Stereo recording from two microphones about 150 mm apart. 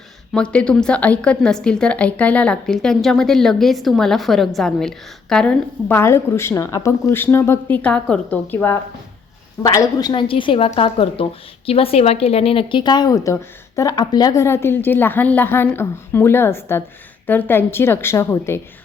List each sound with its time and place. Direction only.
0.3 s a woman's voice: 5° left (ahead or behind)
5.9 s speech: 15° left (ahead or behind)
9.6 s a woman's voice: 25° left (ahead or behind)